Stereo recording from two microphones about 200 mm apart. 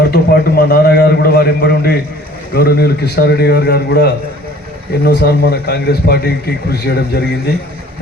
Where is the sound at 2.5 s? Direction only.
50° left (ahead or behind).